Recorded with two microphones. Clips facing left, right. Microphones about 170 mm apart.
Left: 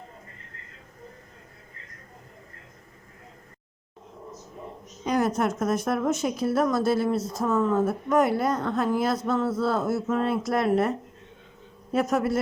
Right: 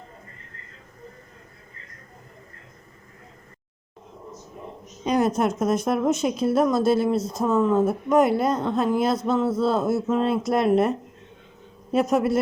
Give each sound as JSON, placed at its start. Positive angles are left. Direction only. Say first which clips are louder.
{"t": 5.0, "sound": "a woman's voice", "louder": "right 3 dB", "side_deg": -20}